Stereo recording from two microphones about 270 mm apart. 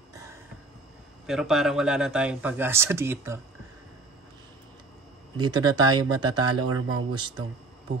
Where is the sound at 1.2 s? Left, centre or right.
Centre.